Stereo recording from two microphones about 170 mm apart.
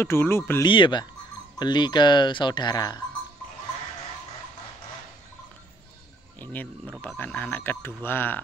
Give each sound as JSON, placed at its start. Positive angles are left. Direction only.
{"t": 0.0, "sound": "speech", "side_deg": 15}
{"t": 0.7, "sound": "speech", "side_deg": 30}
{"t": 6.4, "sound": "speech", "side_deg": 10}